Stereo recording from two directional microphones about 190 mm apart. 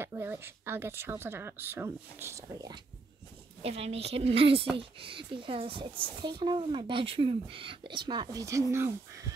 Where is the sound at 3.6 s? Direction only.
30° right (ahead or behind).